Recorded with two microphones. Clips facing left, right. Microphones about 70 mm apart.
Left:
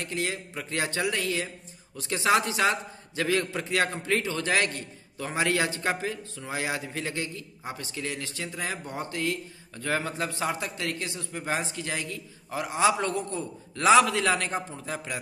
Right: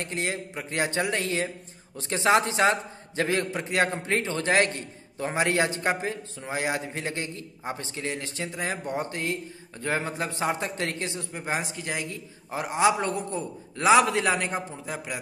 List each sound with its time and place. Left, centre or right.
0.0 s a man's voice: right